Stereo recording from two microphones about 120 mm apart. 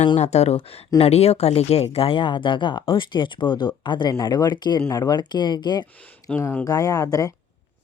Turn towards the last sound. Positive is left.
turn(degrees=30)  # may be behind; listen again after turning